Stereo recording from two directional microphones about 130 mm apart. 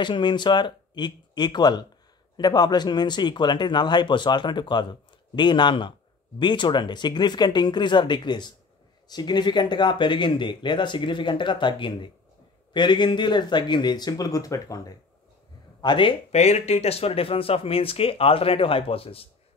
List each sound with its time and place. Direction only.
0.0 s speech: 35° left (ahead or behind)
15.8 s speech: 40° left (ahead or behind)